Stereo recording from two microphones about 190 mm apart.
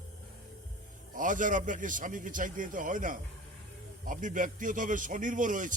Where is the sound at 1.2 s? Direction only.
45° right (ahead or behind).